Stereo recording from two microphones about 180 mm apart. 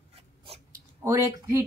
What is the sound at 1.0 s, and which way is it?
Speech, 15° right (ahead or behind).